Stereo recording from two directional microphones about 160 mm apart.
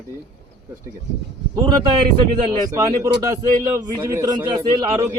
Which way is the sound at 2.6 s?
15° right (ahead or behind).